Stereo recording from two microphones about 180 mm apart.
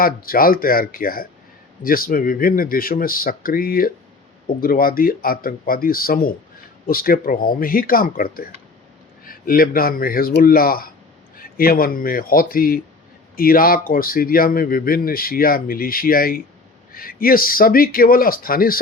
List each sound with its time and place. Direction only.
0.0 s a man's voice: 55° left (ahead or behind)